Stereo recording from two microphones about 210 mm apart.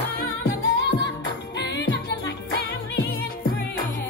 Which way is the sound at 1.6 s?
55° left (ahead or behind).